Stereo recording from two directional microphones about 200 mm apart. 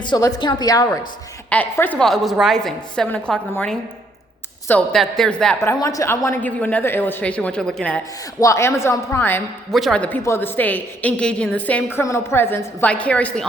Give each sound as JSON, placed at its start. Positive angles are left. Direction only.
{"t": 0.0, "sound": "a woman's voice", "side_deg": 20}
{"t": 1.5, "sound": "a woman's voice", "side_deg": 10}